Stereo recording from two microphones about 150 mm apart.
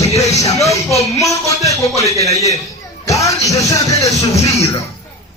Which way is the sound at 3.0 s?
20° left (ahead or behind).